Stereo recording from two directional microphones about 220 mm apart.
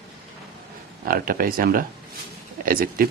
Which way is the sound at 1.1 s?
40° right (ahead or behind).